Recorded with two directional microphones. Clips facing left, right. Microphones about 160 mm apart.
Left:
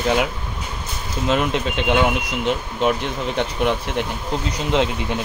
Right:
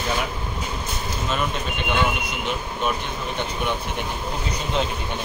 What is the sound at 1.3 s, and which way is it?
Speech, 90° left.